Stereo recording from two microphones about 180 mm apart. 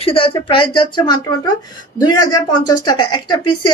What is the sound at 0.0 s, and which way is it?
A woman's voice, 30° left (ahead or behind).